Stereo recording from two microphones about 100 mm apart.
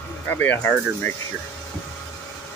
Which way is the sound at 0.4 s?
15° left (ahead or behind).